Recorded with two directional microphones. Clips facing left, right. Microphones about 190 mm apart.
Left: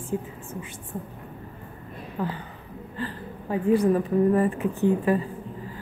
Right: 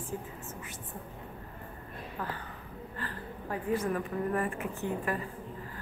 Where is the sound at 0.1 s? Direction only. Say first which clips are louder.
Left 10 dB; 20° left (ahead or behind).